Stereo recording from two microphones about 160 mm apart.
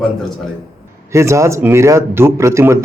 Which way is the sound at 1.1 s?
20° right (ahead or behind).